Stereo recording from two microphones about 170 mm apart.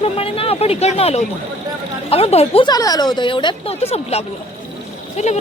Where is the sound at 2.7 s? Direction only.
20° left (ahead or behind).